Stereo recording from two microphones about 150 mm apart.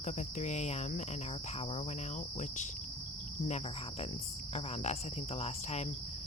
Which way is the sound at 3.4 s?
50° left (ahead or behind).